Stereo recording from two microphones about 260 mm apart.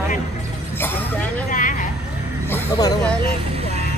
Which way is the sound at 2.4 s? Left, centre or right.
Centre.